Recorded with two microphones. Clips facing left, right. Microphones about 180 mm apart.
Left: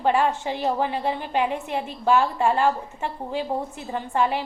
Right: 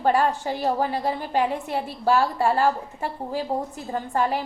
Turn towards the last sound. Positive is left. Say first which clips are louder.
# even
turn(degrees=-40)  # may be behind; listen again after turning